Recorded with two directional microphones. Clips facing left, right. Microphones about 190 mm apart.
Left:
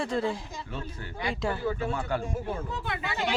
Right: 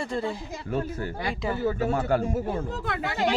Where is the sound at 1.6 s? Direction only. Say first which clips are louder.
Right 5 dB; 40° right (ahead or behind).